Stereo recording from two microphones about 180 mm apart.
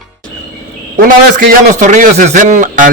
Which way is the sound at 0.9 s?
50° right (ahead or behind).